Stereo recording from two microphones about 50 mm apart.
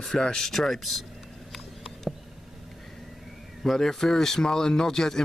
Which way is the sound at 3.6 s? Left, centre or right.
Centre.